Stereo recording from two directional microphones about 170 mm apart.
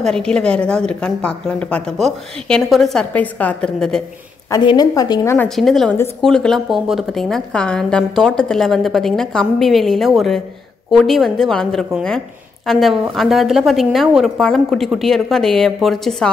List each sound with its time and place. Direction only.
0.0 s a woman's voice: 5° left (ahead or behind)
4.5 s a woman's voice: 25° left (ahead or behind)
5.6 s a woman's voice: centre (ahead or behind)